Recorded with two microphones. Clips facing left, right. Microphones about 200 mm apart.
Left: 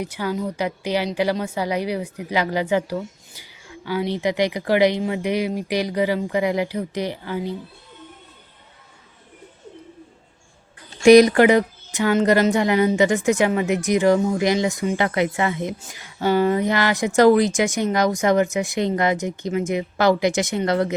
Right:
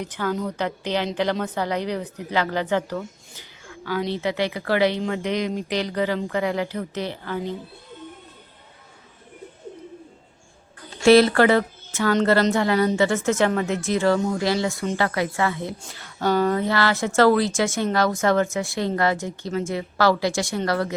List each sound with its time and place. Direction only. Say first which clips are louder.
0.0 s a woman's voice: left 1 dB; 10° left (ahead or behind)
11.0 s a woman's voice: left 3 dB; 15° left (ahead or behind)